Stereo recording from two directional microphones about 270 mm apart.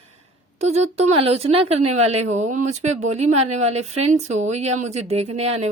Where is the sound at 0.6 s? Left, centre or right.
Right.